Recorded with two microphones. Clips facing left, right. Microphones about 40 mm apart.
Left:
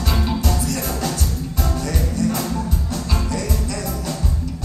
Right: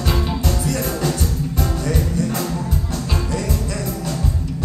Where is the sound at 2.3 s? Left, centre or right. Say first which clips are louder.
Even; centre.